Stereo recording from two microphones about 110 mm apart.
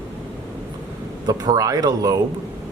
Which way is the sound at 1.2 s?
35° right (ahead or behind).